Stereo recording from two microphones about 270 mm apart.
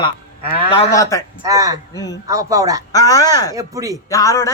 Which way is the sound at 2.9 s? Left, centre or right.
Centre.